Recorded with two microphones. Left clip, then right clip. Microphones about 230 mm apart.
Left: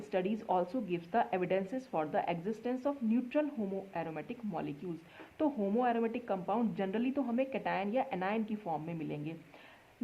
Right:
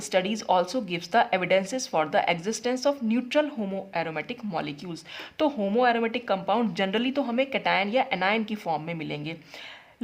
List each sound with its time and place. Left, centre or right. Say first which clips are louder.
0.1 s speech: right 9 dB; right